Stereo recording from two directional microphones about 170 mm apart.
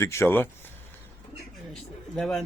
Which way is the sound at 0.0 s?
15° left (ahead or behind).